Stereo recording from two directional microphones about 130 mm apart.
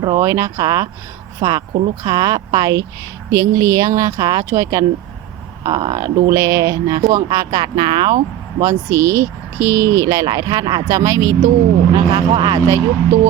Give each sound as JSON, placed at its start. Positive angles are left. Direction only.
{"t": 0.2, "sound": "speech", "side_deg": -20}
{"t": 8.6, "sound": "speech", "side_deg": -25}